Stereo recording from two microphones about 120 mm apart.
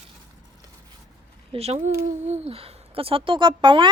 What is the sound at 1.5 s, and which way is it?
Speech, 55° right (ahead or behind).